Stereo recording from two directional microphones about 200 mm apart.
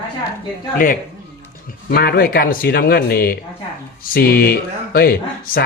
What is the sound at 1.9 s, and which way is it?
Speech, 50° left (ahead or behind).